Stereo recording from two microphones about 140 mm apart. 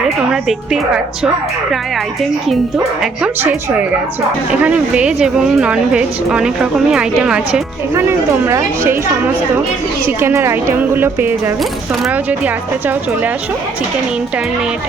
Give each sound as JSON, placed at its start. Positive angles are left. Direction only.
{"t": 0.4, "sound": "a woman's voice", "side_deg": -5}
{"t": 4.5, "sound": "a woman's voice", "side_deg": -10}
{"t": 7.9, "sound": "speech", "side_deg": -20}
{"t": 10.1, "sound": "a woman's voice", "side_deg": -15}